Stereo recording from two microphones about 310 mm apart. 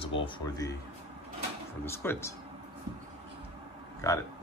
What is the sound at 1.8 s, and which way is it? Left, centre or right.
Speech, centre.